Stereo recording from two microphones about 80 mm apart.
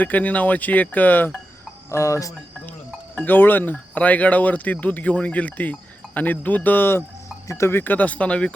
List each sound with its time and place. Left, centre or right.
0.0 s speech: centre
1.9 s cricket: left
3.2 s speech: left